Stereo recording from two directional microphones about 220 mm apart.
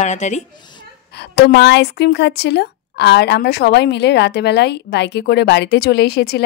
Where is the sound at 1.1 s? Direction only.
50° left (ahead or behind).